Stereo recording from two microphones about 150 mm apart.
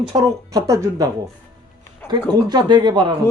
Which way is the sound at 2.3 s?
30° right (ahead or behind).